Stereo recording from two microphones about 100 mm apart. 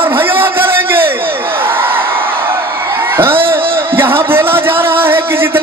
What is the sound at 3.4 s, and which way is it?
Speech, 20° right (ahead or behind).